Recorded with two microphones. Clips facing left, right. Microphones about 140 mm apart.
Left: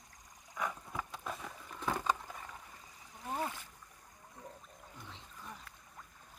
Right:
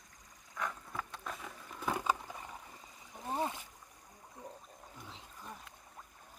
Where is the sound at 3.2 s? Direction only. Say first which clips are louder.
Right 2 dB; 20° right (ahead or behind).